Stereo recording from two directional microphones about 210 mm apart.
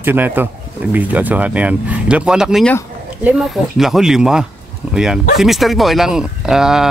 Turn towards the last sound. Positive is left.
turn(degrees=0)  # may be behind; listen again after turning